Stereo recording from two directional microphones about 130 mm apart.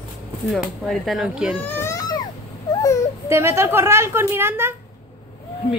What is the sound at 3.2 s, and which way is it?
A woman's voice, 20° right (ahead or behind).